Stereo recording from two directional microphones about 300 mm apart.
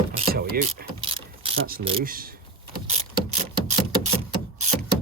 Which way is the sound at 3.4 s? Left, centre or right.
Right.